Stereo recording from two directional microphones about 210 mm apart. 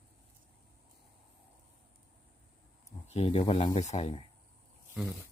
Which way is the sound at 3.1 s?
30° left (ahead or behind).